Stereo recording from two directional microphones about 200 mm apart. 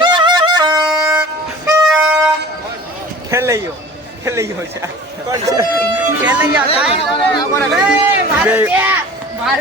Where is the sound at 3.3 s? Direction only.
15° right (ahead or behind).